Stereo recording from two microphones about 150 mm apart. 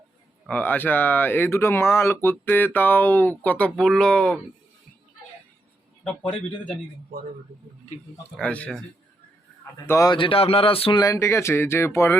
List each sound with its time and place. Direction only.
0.4 s speech: 10° left (ahead or behind)
8.4 s speech: 10° left (ahead or behind)
9.8 s speech: 15° left (ahead or behind)
10.1 s speech: 35° left (ahead or behind)
11.0 s speech: 20° left (ahead or behind)